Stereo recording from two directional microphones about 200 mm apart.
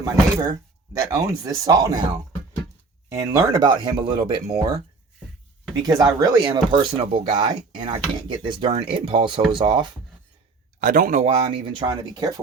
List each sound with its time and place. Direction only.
0.0 s speech: 15° right (ahead or behind)
3.2 s speech: 15° right (ahead or behind)
6.0 s speech: 20° right (ahead or behind)
10.8 s speech: 45° right (ahead or behind); by 12.3 s 25° right (ahead or behind)